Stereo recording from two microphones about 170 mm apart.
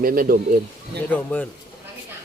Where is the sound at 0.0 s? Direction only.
55° right (ahead or behind).